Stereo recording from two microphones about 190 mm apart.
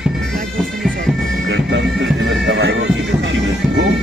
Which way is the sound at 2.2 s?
80° right.